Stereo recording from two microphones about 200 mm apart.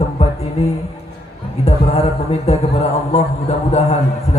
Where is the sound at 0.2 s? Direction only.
30° left (ahead or behind).